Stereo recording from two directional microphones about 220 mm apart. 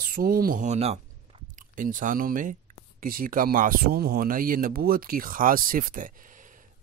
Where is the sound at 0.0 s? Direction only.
40° right (ahead or behind).